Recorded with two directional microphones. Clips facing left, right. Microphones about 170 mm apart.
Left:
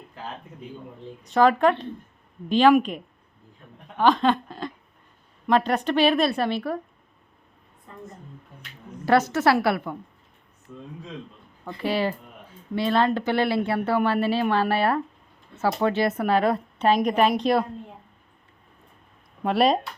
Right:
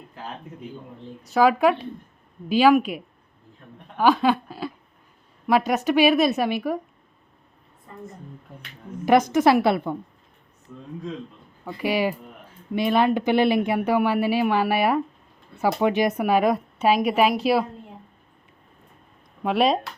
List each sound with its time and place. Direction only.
1.3 s speech: 5° right (ahead or behind)
9.0 s speech: 15° right (ahead or behind)
11.6 s speech: 10° right (ahead or behind)
19.4 s speech: centre (ahead or behind)